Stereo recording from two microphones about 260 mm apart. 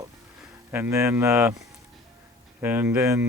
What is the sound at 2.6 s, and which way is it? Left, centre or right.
Speech, centre.